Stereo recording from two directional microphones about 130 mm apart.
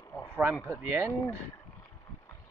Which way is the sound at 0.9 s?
20° right (ahead or behind).